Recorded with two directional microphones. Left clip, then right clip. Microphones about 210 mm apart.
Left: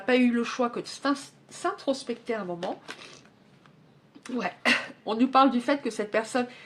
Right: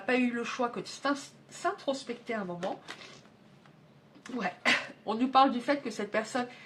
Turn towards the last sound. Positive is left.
turn(degrees=40)  # may be behind; listen again after turning